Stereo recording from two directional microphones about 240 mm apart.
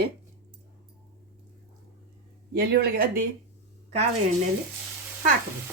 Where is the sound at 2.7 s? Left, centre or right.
Right.